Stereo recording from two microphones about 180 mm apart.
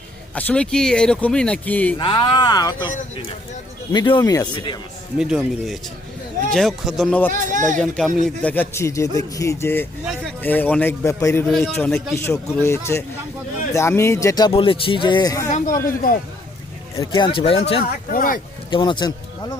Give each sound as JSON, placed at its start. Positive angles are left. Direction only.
{"t": 0.3, "sound": "speech", "side_deg": 5}
{"t": 2.0, "sound": "a man's voice", "side_deg": 25}
{"t": 3.9, "sound": "a man's voice", "side_deg": 25}
{"t": 5.1, "sound": "speech", "side_deg": -5}
{"t": 7.3, "sound": "speech", "side_deg": -45}
{"t": 7.8, "sound": "a man's voice", "side_deg": 5}
{"t": 15.5, "sound": "a man's voice", "side_deg": 50}
{"t": 17.1, "sound": "a man's voice", "side_deg": 25}
{"t": 18.1, "sound": "a man's voice", "side_deg": 50}
{"t": 18.7, "sound": "speech", "side_deg": 25}